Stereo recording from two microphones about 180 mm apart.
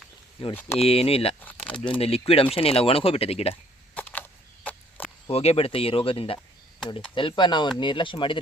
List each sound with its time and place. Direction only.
0.8 s speech: 35° left (ahead or behind)
1.5 s speech: 5° left (ahead or behind)
1.8 s speech: 30° left (ahead or behind)
3.5 s a sound: 10° left (ahead or behind)
5.3 s speech: 35° left (ahead or behind)